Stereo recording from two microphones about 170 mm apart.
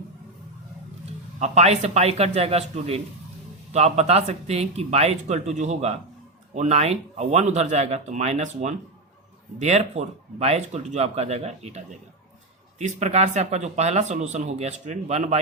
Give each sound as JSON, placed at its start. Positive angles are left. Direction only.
{"t": 1.4, "sound": "speech", "side_deg": -40}
{"t": 12.8, "sound": "speech", "side_deg": -40}